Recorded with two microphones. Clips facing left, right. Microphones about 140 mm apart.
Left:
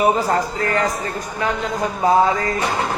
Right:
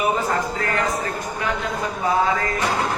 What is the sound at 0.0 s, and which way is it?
Speech, 35° left (ahead or behind).